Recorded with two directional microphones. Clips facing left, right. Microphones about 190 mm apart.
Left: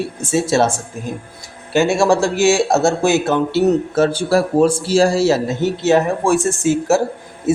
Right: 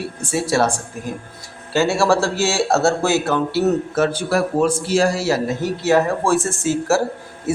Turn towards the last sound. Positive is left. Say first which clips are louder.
# left 5 dB
turn(degrees=20)  # may be behind; listen again after turning